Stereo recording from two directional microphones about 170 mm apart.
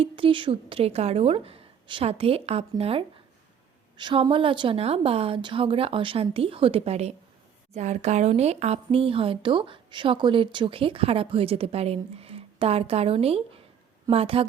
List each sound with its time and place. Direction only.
0.0 s speech: 30° right (ahead or behind)